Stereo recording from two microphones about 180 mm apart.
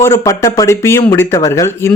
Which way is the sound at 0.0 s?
15° left (ahead or behind).